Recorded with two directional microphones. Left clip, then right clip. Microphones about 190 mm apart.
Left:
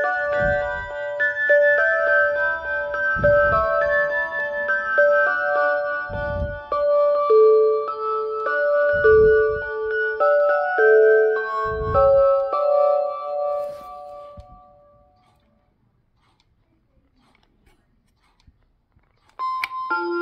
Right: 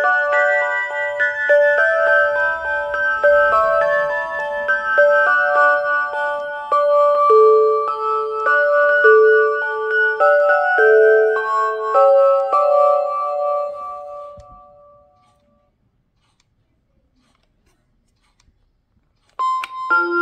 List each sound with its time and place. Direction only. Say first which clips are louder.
0.0 s music: right 6 dB; 20° right (ahead or behind)
19.3 s doorbell: right 6 dB; 20° right (ahead or behind)
19.9 s music: right 9 dB; 20° right (ahead or behind)